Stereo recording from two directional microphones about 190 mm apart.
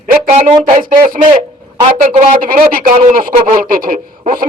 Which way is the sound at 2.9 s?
35° right (ahead or behind).